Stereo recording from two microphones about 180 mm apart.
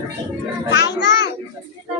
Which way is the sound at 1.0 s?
75° left (ahead or behind).